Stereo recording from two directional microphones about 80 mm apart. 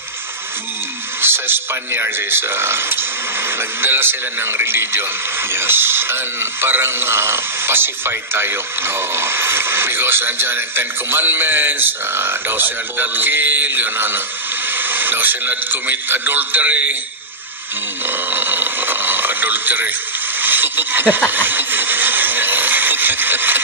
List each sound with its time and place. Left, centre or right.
1.2 s speech: right
18.0 s speech: right
21.3 s a sound: right